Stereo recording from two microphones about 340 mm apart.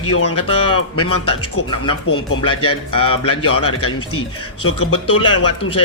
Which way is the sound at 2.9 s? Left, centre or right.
Centre.